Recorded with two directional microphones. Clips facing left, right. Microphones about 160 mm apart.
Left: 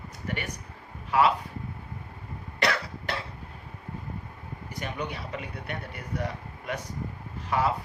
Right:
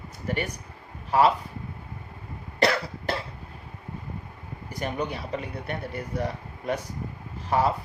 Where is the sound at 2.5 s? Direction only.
35° right (ahead or behind).